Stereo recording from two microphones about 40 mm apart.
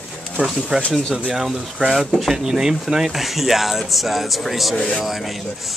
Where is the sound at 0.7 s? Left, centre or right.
Right.